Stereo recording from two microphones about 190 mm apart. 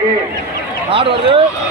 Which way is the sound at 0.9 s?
30° right (ahead or behind).